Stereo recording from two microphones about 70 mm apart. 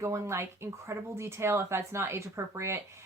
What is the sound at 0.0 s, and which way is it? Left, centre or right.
Speech, right.